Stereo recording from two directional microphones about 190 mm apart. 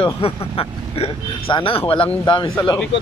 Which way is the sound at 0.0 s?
30° left (ahead or behind).